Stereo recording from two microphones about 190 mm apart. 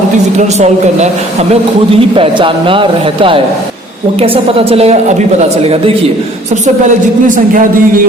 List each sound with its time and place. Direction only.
0.3 s a woman's voice: 35° right (ahead or behind)
7.3 s speech: 45° right (ahead or behind)